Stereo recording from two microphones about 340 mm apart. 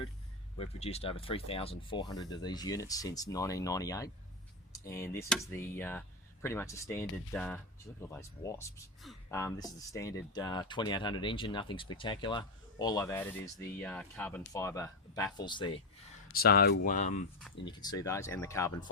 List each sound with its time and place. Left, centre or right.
0.5 s speech: centre
16.3 s speech: left
17.7 s speech: centre